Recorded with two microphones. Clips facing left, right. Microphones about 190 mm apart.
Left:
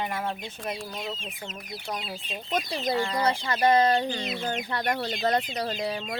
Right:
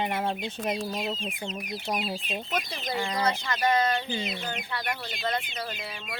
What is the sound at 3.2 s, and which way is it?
Speech, 30° left (ahead or behind).